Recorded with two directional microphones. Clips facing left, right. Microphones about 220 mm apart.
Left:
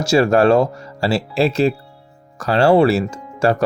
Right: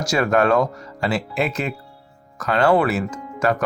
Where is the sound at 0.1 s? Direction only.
30° left (ahead or behind).